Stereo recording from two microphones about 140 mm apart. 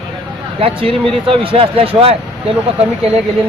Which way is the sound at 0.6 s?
40° right (ahead or behind).